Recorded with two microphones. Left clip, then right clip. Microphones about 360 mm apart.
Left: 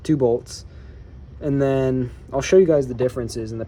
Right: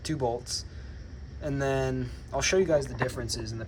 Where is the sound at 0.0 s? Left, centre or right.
Centre.